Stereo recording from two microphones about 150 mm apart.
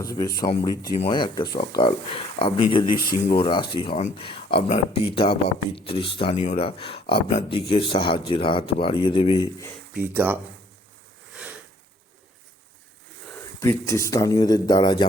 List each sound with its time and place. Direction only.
0.0 s speech: 20° left (ahead or behind)
9.9 s speech: 10° right (ahead or behind)
13.6 s speech: 20° left (ahead or behind)